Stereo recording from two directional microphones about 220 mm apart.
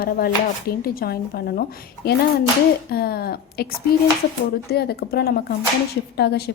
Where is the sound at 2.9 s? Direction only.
45° left (ahead or behind).